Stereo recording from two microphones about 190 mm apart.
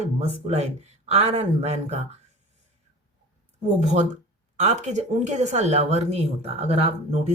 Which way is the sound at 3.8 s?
40° right (ahead or behind).